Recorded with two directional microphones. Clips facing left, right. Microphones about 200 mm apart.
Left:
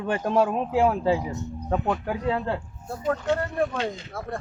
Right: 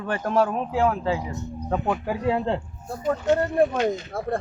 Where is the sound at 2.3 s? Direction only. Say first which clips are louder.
Right 3 dB; 25° right (ahead or behind).